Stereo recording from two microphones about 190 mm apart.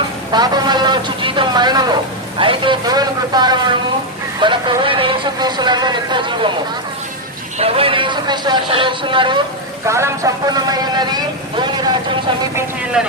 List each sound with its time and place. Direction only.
0.3 s a man's voice: 20° right (ahead or behind)
7.6 s speech: 30° right (ahead or behind)
9.8 s speech: 15° right (ahead or behind)
12.5 s speech: 5° right (ahead or behind)